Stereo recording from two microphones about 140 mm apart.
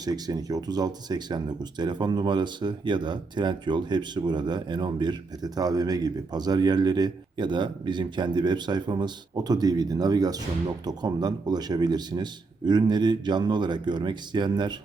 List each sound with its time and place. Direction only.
0.0 s speech: 30° right (ahead or behind)